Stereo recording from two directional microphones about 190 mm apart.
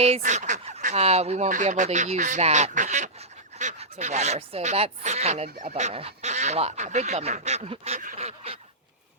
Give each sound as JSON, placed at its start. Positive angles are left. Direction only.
{"t": 0.0, "sound": "speech", "side_deg": -35}